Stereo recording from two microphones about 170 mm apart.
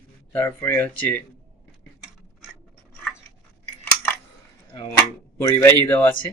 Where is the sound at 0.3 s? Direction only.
10° left (ahead or behind).